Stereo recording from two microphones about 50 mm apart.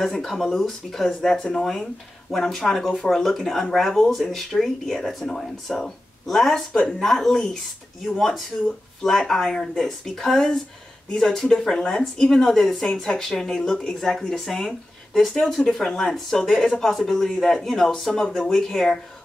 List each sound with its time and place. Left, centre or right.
0.0 s speech: centre
6.7 s speech: centre
7.0 s speech: centre
13.9 s speech: centre